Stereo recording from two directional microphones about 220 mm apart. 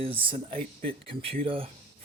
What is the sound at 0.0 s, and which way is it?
Speech, 25° right (ahead or behind).